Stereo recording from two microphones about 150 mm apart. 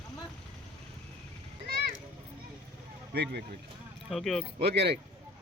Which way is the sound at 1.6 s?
90° right.